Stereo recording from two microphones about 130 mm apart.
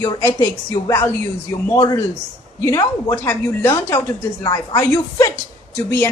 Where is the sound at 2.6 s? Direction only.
25° left (ahead or behind).